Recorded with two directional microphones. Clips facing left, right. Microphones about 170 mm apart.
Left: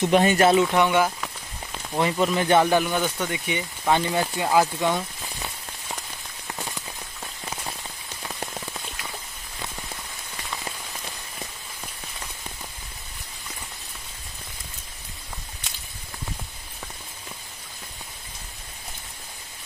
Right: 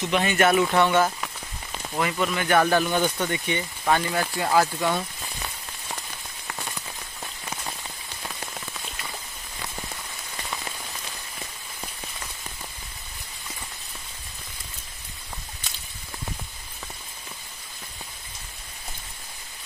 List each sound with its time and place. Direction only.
0.0 s speech: 40° left (ahead or behind)
0.7 s speech: 10° left (ahead or behind)
2.0 s speech: 30° left (ahead or behind)
2.9 s speech: 5° left (ahead or behind)